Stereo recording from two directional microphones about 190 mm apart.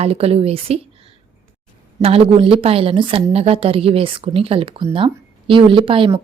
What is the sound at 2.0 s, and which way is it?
A woman's voice, 30° right (ahead or behind).